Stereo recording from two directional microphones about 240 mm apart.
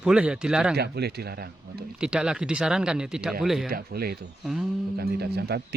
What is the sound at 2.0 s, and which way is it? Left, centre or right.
Speech, centre.